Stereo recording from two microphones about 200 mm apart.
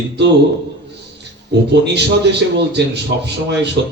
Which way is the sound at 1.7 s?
60° right (ahead or behind).